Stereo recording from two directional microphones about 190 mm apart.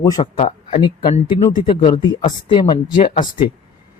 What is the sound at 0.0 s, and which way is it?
Speech, 20° left (ahead or behind).